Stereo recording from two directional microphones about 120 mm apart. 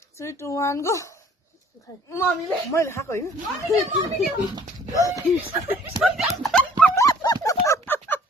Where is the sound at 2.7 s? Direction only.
20° left (ahead or behind).